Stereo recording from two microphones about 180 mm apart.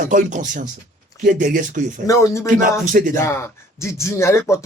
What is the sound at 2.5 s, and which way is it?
Speech, 45° right (ahead or behind).